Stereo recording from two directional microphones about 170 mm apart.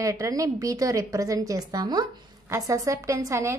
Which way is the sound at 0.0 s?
20° right (ahead or behind).